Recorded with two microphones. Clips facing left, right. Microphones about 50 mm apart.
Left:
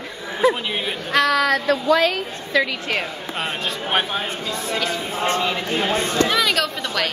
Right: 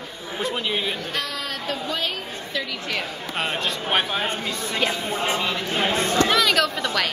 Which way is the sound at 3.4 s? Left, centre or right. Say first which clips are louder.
Even; centre.